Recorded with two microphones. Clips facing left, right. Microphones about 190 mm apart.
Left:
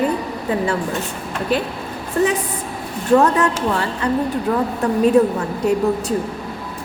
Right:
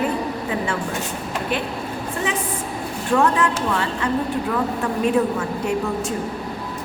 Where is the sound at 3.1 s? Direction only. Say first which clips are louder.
Left 4 dB; 40° left (ahead or behind).